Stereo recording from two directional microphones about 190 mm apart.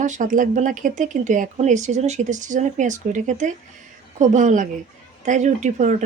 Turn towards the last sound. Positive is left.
turn(degrees=-40)  # may be behind; listen again after turning